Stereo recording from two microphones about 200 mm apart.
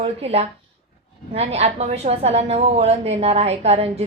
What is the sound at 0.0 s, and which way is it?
A woman's voice, 30° right (ahead or behind).